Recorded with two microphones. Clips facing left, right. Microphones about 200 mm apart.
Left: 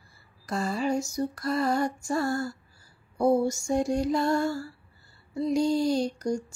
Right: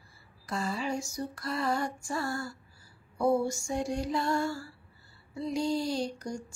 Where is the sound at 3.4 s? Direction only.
40° left (ahead or behind).